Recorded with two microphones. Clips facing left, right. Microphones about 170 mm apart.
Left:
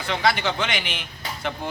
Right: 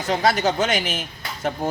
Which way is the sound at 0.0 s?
40° right (ahead or behind).